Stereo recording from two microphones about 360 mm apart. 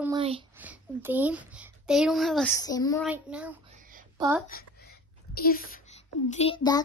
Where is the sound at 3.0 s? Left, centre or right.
Centre.